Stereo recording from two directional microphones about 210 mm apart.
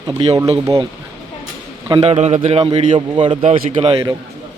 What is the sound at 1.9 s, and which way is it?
A man's voice, 30° right (ahead or behind).